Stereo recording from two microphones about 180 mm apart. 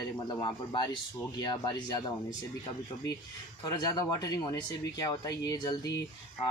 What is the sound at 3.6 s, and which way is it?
Speech, 20° left (ahead or behind).